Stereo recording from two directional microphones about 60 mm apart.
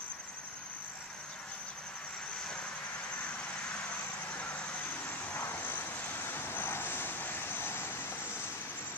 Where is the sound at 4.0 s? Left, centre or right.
Left.